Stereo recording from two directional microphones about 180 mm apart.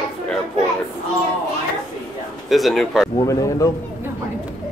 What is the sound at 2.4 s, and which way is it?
Speech, centre (ahead or behind).